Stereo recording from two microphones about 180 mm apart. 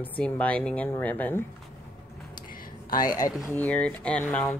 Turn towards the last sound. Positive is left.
turn(degrees=5)  # may be behind; listen again after turning